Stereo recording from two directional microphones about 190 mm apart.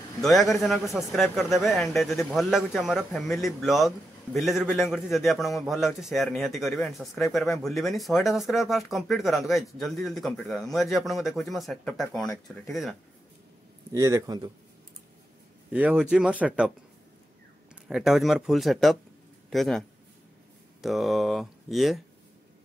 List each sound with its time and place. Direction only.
0.2 s speech: centre (ahead or behind)
13.9 s a man's voice: 15° right (ahead or behind)
15.7 s speech: 5° right (ahead or behind)
17.8 s speech: centre (ahead or behind)
20.8 s speech: centre (ahead or behind)